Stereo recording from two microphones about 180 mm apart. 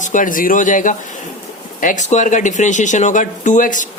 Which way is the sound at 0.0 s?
45° left (ahead or behind).